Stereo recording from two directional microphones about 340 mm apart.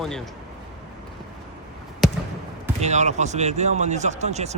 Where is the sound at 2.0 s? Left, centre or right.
Centre.